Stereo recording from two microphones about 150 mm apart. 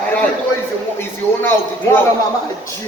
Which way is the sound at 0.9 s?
15° left (ahead or behind).